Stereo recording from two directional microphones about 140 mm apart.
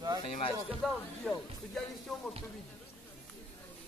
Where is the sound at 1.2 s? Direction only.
10° left (ahead or behind).